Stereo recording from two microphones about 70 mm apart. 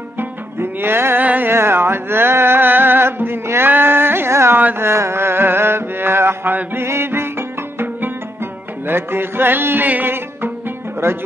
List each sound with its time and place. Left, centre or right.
0.2 s music: right
11.0 s speech: right